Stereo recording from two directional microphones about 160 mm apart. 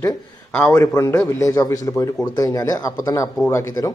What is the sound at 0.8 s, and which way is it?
Speech, 20° left (ahead or behind).